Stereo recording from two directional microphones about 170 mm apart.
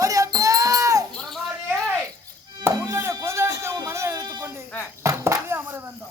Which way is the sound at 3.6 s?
15° right (ahead or behind).